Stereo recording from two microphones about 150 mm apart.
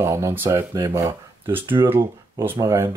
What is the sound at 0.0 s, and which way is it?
Speech, 20° right (ahead or behind).